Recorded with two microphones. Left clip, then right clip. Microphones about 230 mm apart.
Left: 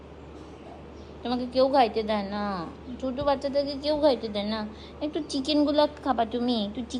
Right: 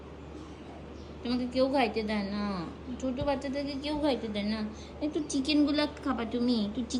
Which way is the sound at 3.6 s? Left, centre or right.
Centre.